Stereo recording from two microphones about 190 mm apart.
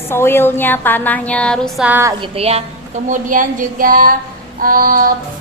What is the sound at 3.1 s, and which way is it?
Female singing, 45° right (ahead or behind).